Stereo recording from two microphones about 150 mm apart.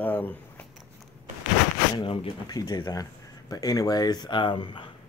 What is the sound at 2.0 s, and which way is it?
Speech, 35° left (ahead or behind).